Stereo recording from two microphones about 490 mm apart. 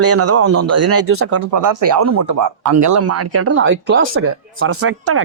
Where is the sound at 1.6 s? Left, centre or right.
Right.